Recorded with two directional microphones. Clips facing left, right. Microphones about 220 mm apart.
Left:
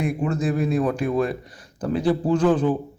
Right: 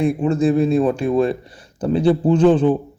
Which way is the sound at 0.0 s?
30° right (ahead or behind).